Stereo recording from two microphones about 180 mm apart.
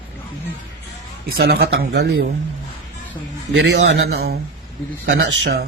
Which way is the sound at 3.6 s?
90° right.